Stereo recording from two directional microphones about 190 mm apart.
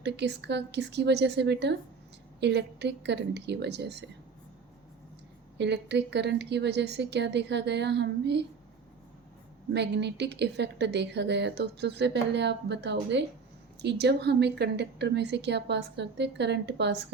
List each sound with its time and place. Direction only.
0.0 s a woman's voice: 65° right (ahead or behind)
5.5 s a woman's voice: 65° right (ahead or behind)
9.7 s a woman's voice: 65° right (ahead or behind)